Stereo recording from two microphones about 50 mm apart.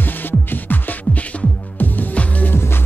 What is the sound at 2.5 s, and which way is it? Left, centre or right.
Music, left.